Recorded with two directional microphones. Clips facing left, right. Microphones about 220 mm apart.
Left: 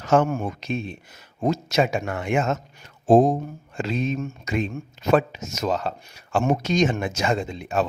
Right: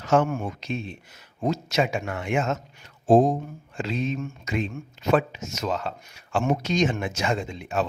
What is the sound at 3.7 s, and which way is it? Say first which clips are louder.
A man's voice: left 2 dB; 50° left (ahead or behind).